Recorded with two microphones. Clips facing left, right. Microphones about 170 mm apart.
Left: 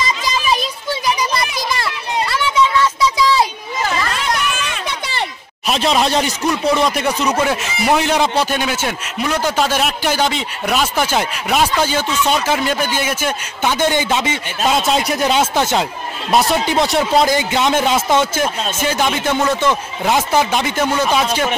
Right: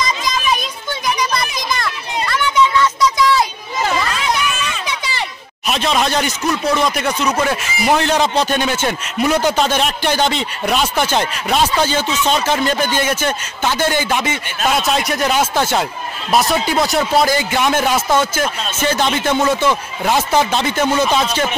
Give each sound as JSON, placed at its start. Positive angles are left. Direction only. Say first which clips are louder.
{"t": 0.2, "sound": "a sound", "louder": "left 1 dB", "side_deg": 35}
{"t": 4.8, "sound": "a sound", "louder": "even", "side_deg": 55}
{"t": 6.0, "sound": "speech", "louder": "left 1 dB", "side_deg": 30}
{"t": 6.6, "sound": "speech", "louder": "left 2 dB", "side_deg": 0}
{"t": 13.7, "sound": "speech", "louder": "left 1 dB", "side_deg": 20}
{"t": 16.7, "sound": "speech", "louder": "left 1 dB", "side_deg": -5}
{"t": 17.3, "sound": "speech", "louder": "left 1 dB", "side_deg": 20}
{"t": 17.8, "sound": "speech", "louder": "left 1 dB", "side_deg": 0}
{"t": 18.4, "sound": "speech", "louder": "even", "side_deg": 10}
{"t": 19.3, "sound": "speech", "louder": "right 2 dB", "side_deg": -5}
{"t": 19.7, "sound": "speech", "louder": "even", "side_deg": 15}